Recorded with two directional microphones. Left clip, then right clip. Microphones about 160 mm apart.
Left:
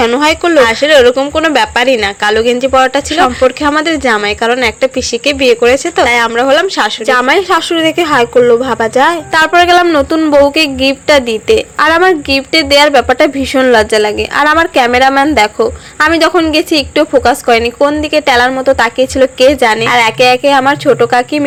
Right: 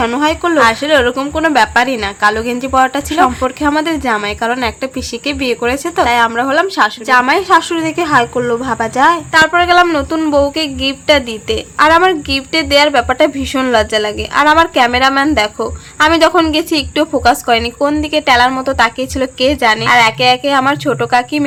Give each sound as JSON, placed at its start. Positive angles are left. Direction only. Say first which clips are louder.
{"t": 0.2, "sound": "a woman's voice", "louder": "even", "side_deg": 20}